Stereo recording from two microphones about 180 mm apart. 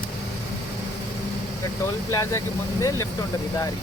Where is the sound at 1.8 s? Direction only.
15° left (ahead or behind).